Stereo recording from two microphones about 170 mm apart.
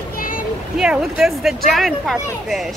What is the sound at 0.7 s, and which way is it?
Speech, 5° right (ahead or behind).